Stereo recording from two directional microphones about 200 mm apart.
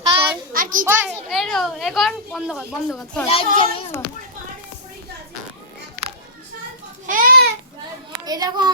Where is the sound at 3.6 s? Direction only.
25° left (ahead or behind).